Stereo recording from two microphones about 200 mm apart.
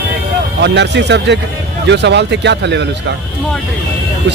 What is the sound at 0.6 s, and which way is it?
Speech, 60° right (ahead or behind).